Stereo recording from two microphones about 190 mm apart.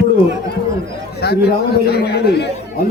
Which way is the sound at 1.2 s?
60° left (ahead or behind).